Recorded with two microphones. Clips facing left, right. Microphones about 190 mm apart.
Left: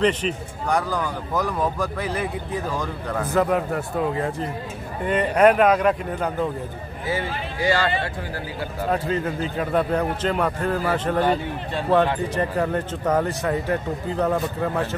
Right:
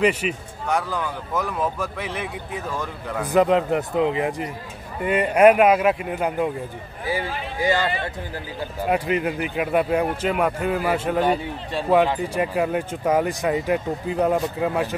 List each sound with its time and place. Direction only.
0.0 s speech: 10° right (ahead or behind)
3.2 s a man's voice: 15° right (ahead or behind)